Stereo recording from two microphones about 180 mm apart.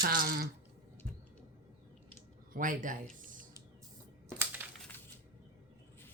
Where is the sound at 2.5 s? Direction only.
50° right (ahead or behind).